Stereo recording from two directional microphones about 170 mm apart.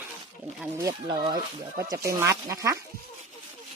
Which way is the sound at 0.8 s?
20° right (ahead or behind).